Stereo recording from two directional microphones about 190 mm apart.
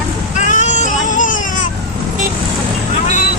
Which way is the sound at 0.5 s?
40° left (ahead or behind).